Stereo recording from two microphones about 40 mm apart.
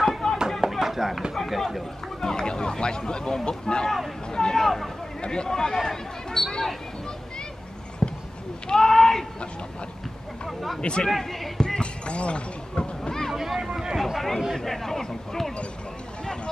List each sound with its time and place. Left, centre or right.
0.2 s a sound: centre
0.7 s chop: centre
1.3 s speech: centre
2.2 s speech: centre
4.6 s speech: centre
5.2 s speech: left; by 6.8 s centre
8.0 s a sound: centre
8.6 s speech: centre
10.8 s speech: left
11.1 s speech: centre
11.8 s speech: left
13.3 s speech: centre
13.6 s speech: centre
13.9 s speech: centre